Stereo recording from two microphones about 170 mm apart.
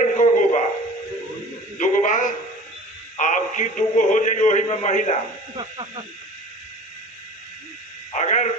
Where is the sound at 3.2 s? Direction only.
50° left (ahead or behind).